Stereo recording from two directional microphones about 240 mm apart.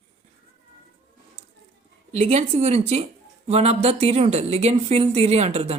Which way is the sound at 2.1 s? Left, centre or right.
Right.